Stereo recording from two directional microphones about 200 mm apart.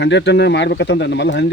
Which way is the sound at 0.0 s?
60° left (ahead or behind).